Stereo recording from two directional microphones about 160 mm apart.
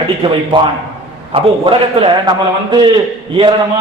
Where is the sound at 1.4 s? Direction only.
35° right (ahead or behind).